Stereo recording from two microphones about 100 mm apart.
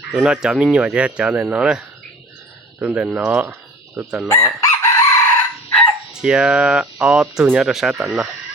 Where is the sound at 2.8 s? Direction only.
20° right (ahead or behind).